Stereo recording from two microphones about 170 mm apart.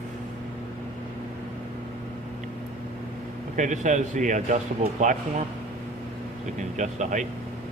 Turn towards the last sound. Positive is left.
turn(degrees=-45)  # may be behind; listen again after turning